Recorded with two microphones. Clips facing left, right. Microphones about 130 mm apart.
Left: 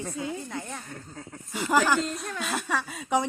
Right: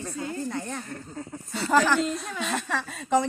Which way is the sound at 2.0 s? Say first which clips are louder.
Right 2 dB; centre (ahead or behind).